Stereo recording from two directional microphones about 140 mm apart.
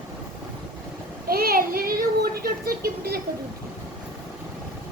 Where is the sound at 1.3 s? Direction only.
90° right.